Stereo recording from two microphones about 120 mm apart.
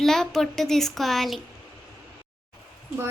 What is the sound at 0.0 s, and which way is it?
Speech, 5° left (ahead or behind).